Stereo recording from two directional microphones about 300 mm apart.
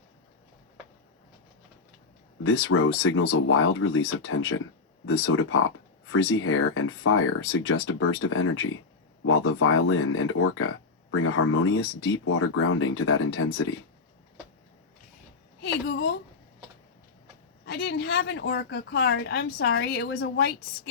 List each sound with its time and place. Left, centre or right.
2.4 s speech: left
15.6 s a sound: left
17.7 s a woman's voice: left